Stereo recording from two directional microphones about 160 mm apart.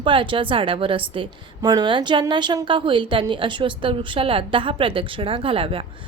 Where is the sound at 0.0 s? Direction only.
30° right (ahead or behind).